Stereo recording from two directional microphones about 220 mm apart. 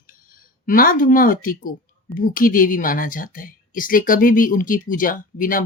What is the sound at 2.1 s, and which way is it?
Speech, 40° left (ahead or behind).